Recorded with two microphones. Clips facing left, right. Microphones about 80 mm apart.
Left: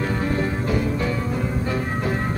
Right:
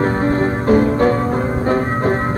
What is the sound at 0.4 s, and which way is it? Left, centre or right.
Music, right.